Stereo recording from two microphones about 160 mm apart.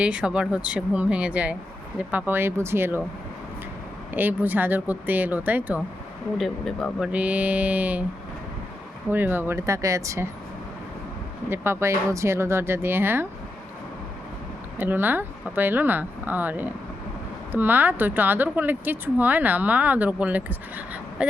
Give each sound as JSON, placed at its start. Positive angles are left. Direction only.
{"t": 0.0, "sound": "speech", "side_deg": -5}
{"t": 4.1, "sound": "speech", "side_deg": -10}
{"t": 6.3, "sound": "speech", "side_deg": 0}
{"t": 7.1, "sound": "speech", "side_deg": -10}
{"t": 9.0, "sound": "speech", "side_deg": -10}
{"t": 11.4, "sound": "speech", "side_deg": -15}
{"t": 14.8, "sound": "speech", "side_deg": -10}